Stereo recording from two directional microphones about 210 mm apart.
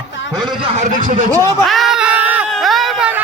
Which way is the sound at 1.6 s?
Centre (ahead or behind).